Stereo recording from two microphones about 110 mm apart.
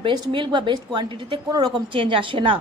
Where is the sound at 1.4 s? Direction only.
40° right (ahead or behind).